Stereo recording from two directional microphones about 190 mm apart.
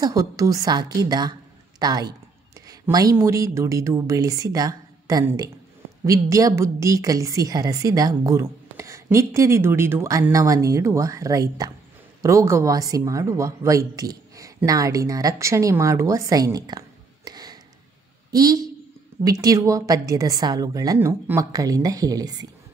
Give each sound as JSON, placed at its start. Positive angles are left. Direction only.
{"t": 0.0, "sound": "a woman's voice", "side_deg": -20}